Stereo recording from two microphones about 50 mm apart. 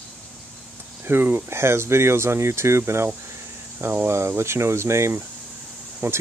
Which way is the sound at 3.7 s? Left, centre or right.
Right.